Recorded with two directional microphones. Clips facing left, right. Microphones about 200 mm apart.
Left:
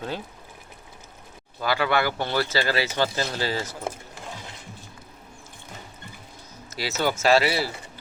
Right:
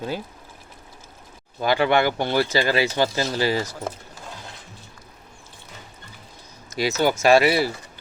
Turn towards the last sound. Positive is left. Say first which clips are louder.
# right 4 dB
turn(degrees=-15)  # may be behind; listen again after turning